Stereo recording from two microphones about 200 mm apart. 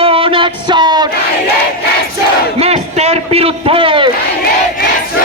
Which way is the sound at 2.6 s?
30° right (ahead or behind).